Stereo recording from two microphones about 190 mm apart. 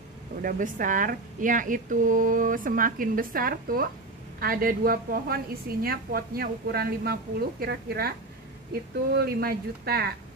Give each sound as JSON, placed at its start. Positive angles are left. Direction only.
{"t": 0.4, "sound": "a woman's voice", "side_deg": -45}
{"t": 9.1, "sound": "speech", "side_deg": -55}